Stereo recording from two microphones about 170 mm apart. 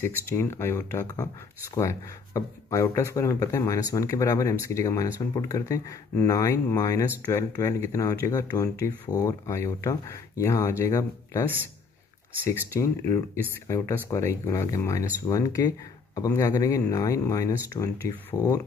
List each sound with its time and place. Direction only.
0.0 s speech: 15° left (ahead or behind)
12.4 s speech: 15° left (ahead or behind)